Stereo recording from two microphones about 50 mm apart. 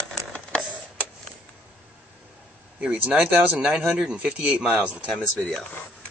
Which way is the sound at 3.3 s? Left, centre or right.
Right.